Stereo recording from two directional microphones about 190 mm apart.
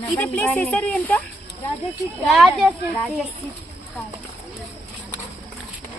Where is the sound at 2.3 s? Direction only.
Centre (ahead or behind).